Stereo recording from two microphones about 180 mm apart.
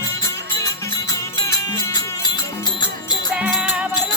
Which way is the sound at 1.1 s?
20° left (ahead or behind).